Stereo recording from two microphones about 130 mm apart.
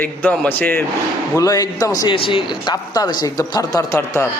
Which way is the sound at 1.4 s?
25° left (ahead or behind).